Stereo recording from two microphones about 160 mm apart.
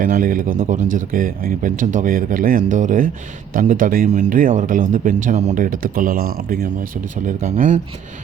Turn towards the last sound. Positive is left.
turn(degrees=-50)  # may be behind; listen again after turning